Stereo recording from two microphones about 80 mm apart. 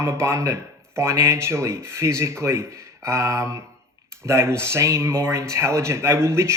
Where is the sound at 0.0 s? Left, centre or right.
Right.